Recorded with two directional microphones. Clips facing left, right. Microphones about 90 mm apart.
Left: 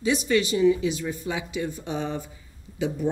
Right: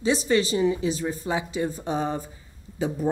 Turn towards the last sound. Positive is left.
turn(degrees=-40)  # may be behind; listen again after turning